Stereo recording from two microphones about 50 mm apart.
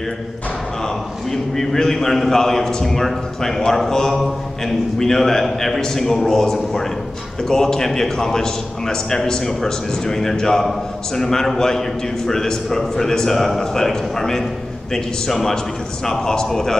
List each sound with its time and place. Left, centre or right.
1.3 s a man's voice: centre